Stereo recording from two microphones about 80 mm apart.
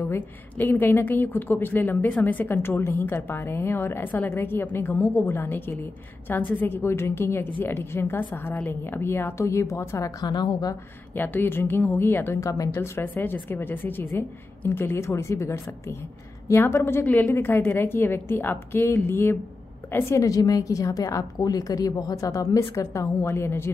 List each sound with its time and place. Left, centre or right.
0.0 s a woman's voice: left
10.3 s a woman's voice: left
11.1 s a woman's voice: left
12.4 s a woman's voice: left
12.8 s a woman's voice: left